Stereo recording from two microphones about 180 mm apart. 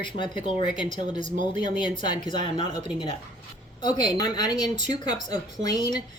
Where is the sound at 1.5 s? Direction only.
25° left (ahead or behind).